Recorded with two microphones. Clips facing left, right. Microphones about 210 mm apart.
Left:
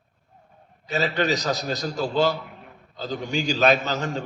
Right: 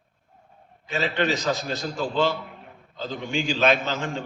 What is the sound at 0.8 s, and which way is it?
A man's voice, 40° left (ahead or behind).